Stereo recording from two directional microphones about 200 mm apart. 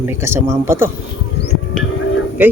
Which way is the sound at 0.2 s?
10° right (ahead or behind).